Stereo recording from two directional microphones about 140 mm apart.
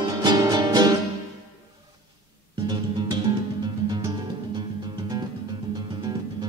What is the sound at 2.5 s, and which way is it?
Music, 30° right (ahead or behind).